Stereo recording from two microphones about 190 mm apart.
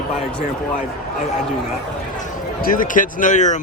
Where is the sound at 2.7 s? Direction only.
45° left (ahead or behind).